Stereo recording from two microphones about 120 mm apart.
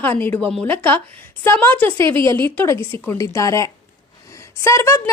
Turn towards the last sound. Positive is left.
turn(degrees=25)  # may be behind; listen again after turning